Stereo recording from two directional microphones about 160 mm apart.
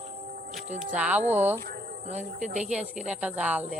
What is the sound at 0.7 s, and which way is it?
Speech, 10° right (ahead or behind).